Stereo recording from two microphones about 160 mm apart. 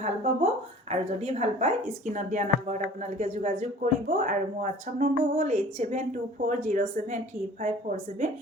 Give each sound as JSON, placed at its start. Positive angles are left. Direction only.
{"t": 0.0, "sound": "speech", "side_deg": -40}